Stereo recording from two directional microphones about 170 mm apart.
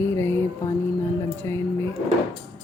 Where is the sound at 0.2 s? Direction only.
15° left (ahead or behind).